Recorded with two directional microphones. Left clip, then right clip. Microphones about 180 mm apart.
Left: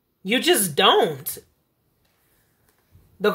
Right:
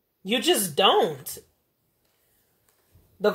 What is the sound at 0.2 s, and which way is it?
Speech, 25° left (ahead or behind).